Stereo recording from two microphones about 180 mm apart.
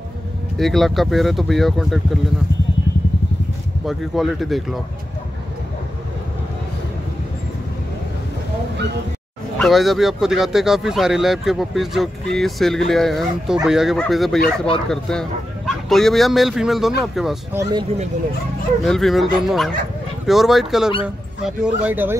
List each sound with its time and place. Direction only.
0.6 s speech: centre (ahead or behind)
3.8 s speech: centre (ahead or behind)
9.6 s speech: centre (ahead or behind)
17.6 s speech: 25° right (ahead or behind)
18.9 s speech: centre (ahead or behind)